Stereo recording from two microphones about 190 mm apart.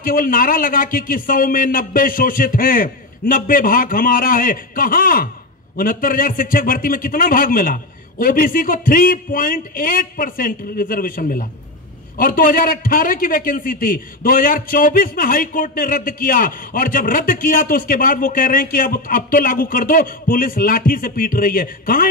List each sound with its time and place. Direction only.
0.0 s a man's voice: 45° left (ahead or behind)